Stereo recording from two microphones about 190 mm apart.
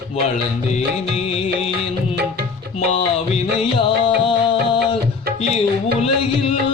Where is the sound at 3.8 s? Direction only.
30° left (ahead or behind).